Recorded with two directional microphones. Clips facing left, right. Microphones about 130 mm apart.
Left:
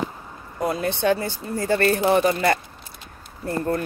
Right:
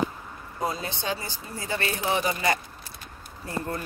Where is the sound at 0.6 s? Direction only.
60° left (ahead or behind).